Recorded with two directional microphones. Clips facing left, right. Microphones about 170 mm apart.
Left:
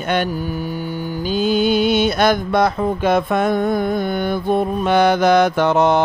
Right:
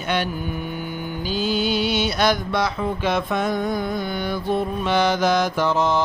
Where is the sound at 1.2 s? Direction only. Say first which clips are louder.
Left 6 dB; 50° left (ahead or behind).